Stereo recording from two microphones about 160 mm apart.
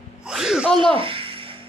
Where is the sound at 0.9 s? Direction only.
35° right (ahead or behind).